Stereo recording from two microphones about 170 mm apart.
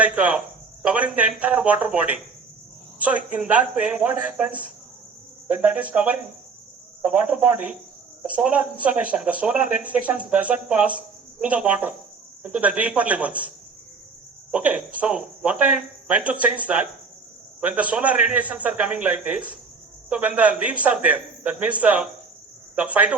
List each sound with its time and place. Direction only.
0.0 s speech: 10° right (ahead or behind)
14.5 s speech: 10° right (ahead or behind)